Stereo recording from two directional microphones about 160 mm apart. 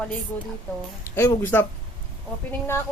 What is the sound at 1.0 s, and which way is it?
Speech, 15° left (ahead or behind).